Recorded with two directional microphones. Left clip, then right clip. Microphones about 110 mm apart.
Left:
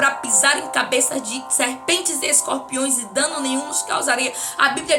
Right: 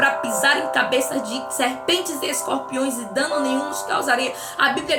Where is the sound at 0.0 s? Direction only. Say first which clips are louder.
Even; 15° left (ahead or behind).